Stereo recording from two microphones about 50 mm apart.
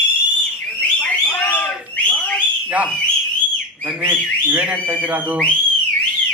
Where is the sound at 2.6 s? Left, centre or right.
Right.